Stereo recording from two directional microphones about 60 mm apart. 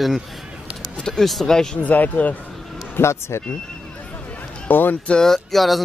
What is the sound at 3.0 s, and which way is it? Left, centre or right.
Speech, left.